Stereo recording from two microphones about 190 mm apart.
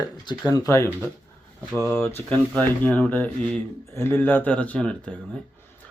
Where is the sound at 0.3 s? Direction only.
20° left (ahead or behind).